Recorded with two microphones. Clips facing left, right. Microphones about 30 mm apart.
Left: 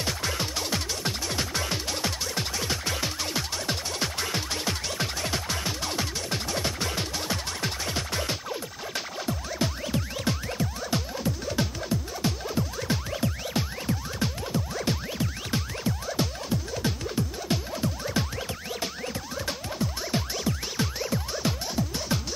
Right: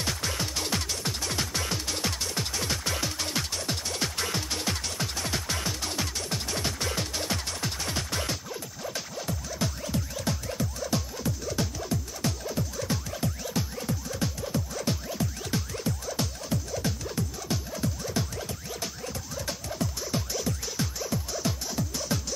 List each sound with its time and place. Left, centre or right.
0.0 s music: centre
8.9 s music: left
14.5 s music: left
19.4 s music: left